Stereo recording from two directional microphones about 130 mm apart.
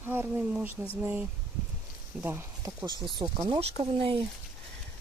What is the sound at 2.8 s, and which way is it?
Speech, 35° right (ahead or behind).